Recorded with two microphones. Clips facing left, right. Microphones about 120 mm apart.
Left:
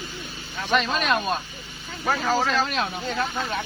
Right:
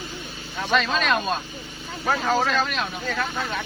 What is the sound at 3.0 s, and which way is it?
Speech, 15° left (ahead or behind).